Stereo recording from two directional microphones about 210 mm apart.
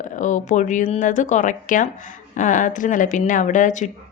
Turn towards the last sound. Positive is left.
turn(degrees=35)  # may be behind; listen again after turning